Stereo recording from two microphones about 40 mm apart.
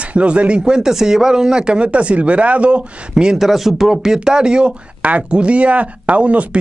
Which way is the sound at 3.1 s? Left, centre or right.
Centre.